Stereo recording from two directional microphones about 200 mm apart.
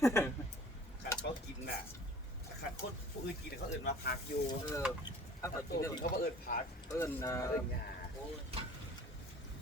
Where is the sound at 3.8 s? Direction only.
50° left (ahead or behind).